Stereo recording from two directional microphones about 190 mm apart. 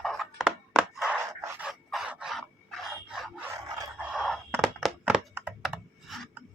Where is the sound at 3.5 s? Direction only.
20° right (ahead or behind).